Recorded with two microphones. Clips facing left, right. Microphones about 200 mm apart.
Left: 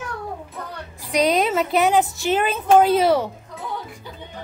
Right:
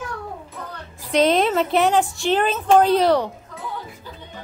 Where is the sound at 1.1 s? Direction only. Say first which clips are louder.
Right 2 dB; centre (ahead or behind).